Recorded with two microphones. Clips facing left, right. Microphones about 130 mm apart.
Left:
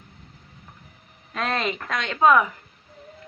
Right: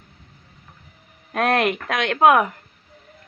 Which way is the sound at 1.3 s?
60° right (ahead or behind).